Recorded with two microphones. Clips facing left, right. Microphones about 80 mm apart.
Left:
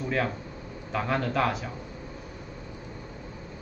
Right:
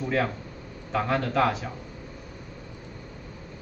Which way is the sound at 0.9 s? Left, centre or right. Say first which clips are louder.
Right 2 dB; centre.